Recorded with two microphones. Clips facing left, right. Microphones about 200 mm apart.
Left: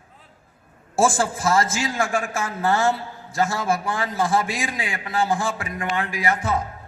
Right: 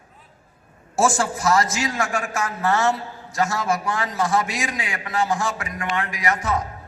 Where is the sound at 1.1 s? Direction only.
30° left (ahead or behind).